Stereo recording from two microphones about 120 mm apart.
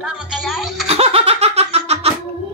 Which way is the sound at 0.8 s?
60° right (ahead or behind).